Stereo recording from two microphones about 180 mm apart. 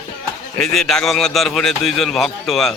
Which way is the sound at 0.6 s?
Centre (ahead or behind).